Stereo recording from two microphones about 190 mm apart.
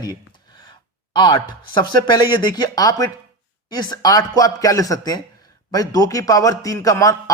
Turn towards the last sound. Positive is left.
turn(degrees=15)  # may be behind; listen again after turning